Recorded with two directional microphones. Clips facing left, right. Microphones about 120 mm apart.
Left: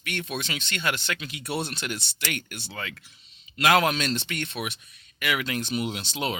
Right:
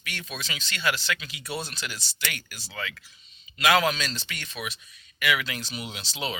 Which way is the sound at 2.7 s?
40° left (ahead or behind).